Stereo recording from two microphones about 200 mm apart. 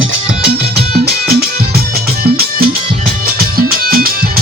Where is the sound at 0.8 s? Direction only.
55° right (ahead or behind).